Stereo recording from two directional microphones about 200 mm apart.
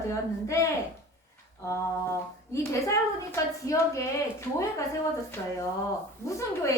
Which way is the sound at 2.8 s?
15° left (ahead or behind).